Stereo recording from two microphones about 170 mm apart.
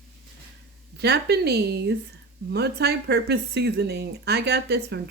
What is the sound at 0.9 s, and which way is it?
Speech, 75° right (ahead or behind).